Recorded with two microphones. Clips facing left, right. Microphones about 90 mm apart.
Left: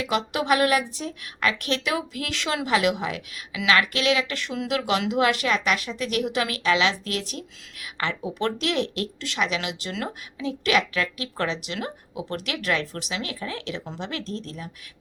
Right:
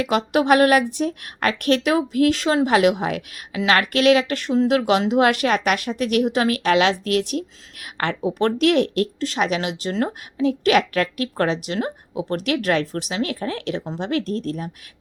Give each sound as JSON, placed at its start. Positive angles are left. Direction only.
{"t": 0.1, "sound": "speech", "side_deg": -50}